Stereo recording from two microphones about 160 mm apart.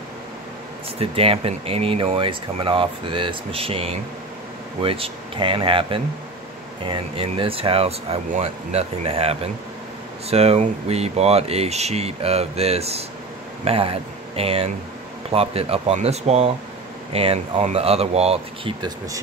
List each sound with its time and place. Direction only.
0.9 s speech: 35° right (ahead or behind)